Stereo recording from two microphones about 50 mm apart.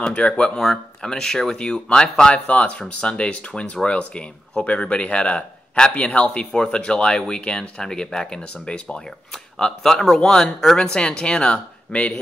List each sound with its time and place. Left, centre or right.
0.0 s speech: centre